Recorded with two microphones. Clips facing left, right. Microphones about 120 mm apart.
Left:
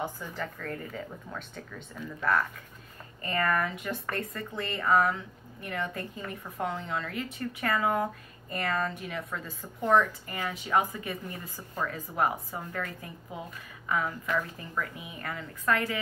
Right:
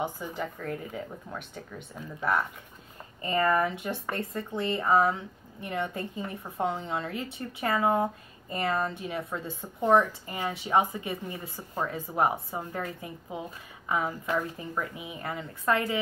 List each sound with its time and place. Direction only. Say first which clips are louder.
0.0 s a woman's voice: right 3 dB; 15° right (ahead or behind)
1.7 s speech: even; 20° right (ahead or behind)